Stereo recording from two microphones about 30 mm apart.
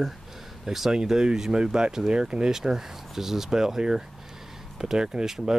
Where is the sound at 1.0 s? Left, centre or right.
Right.